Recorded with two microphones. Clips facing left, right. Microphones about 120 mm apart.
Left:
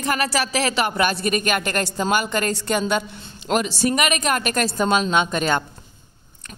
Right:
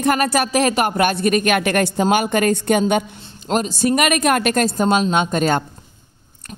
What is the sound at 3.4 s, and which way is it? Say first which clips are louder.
Speech: right 2 dB; 40° right (ahead or behind).